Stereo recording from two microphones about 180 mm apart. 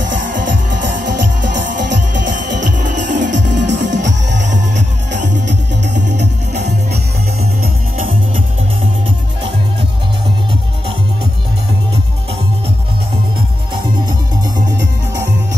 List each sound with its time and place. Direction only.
0.7 s music: 75° right (ahead or behind)